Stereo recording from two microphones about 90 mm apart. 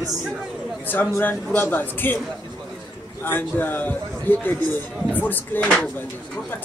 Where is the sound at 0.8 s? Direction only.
20° left (ahead or behind).